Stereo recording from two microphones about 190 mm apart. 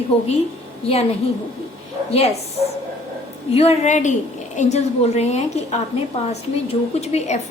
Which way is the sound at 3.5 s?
35° left (ahead or behind).